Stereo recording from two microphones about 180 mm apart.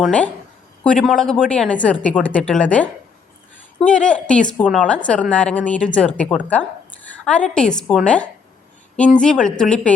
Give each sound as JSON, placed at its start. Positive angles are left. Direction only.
{"t": 0.0, "sound": "speech", "side_deg": 5}